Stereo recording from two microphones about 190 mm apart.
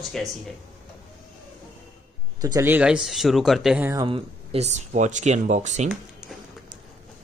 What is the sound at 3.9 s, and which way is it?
Speech, 25° right (ahead or behind).